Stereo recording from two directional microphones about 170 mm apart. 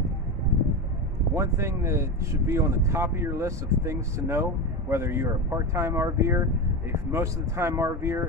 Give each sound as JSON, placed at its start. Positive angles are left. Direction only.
{"t": 1.3, "sound": "speech", "side_deg": -15}